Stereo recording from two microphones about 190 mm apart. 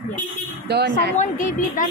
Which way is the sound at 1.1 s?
40° left (ahead or behind).